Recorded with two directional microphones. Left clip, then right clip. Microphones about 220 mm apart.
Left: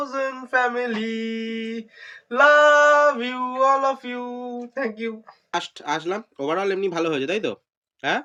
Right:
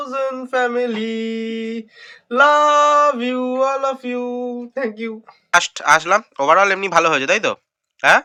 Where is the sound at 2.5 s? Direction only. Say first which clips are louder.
Left 1 dB; 5° right (ahead or behind).